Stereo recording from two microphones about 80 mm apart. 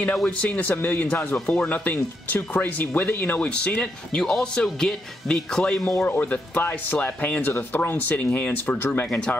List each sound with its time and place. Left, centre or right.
0.0 s speech: centre
6.0 s speech: left